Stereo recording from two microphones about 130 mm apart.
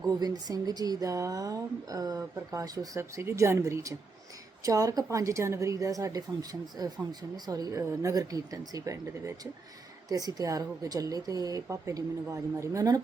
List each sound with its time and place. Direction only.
0.0 s a woman's voice: 30° right (ahead or behind)